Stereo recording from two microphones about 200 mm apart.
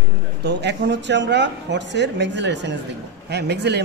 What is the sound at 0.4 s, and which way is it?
Speech, 60° right (ahead or behind).